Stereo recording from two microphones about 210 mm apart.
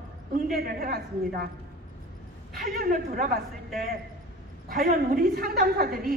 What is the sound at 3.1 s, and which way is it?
Speech, 45° right (ahead or behind).